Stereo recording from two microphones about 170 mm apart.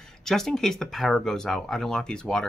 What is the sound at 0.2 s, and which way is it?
Speech, centre (ahead or behind).